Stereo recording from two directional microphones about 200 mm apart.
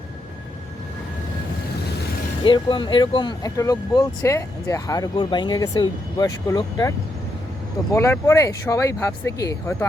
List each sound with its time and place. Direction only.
2.4 s speech: 25° left (ahead or behind)
7.9 s speech: 15° left (ahead or behind)